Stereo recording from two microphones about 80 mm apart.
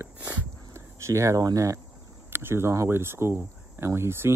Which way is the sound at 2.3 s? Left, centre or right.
Right.